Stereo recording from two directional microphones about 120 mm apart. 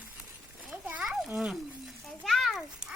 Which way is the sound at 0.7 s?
5° right (ahead or behind).